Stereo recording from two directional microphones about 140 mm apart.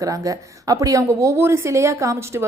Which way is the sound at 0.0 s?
25° right (ahead or behind).